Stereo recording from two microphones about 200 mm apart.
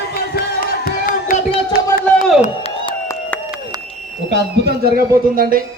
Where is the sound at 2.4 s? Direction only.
30° left (ahead or behind).